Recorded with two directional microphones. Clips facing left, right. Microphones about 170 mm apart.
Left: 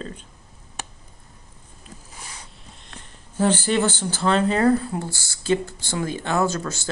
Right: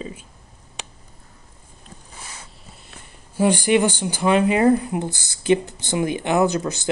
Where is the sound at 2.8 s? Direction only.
10° right (ahead or behind).